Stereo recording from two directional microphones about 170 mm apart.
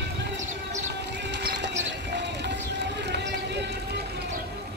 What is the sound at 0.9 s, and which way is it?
Music, 90° right.